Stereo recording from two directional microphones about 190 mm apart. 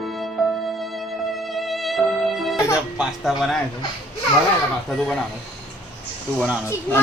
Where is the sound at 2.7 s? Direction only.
5° right (ahead or behind).